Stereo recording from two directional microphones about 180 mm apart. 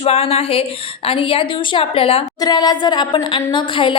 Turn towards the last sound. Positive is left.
turn(degrees=30)  # may be behind; listen again after turning